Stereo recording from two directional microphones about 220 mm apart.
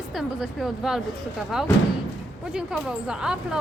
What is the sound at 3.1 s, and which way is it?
Speech, 5° right (ahead or behind).